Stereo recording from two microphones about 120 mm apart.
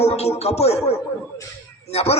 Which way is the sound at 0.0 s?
60° left (ahead or behind).